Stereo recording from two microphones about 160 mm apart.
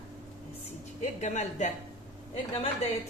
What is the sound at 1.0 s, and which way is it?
Speech, 50° left (ahead or behind).